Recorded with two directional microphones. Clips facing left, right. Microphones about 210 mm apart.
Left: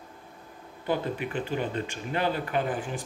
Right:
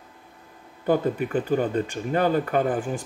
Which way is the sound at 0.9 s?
45° right (ahead or behind).